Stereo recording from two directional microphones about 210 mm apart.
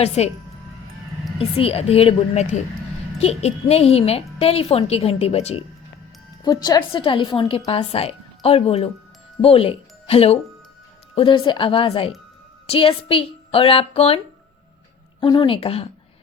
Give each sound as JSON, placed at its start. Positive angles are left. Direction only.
{"t": 0.0, "sound": "speech", "side_deg": 30}
{"t": 1.4, "sound": "a woman's voice", "side_deg": 30}
{"t": 6.4, "sound": "a woman's voice", "side_deg": 20}
{"t": 15.2, "sound": "a woman's voice", "side_deg": 25}